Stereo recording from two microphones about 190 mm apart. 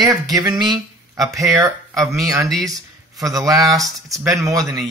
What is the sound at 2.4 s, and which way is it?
Speech, 20° right (ahead or behind).